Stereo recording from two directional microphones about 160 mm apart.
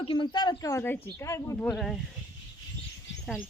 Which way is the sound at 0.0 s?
30° left (ahead or behind).